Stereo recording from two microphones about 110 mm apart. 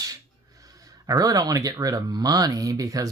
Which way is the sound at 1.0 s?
35° right (ahead or behind).